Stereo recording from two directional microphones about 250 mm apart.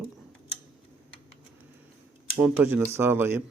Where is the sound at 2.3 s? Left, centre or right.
Centre.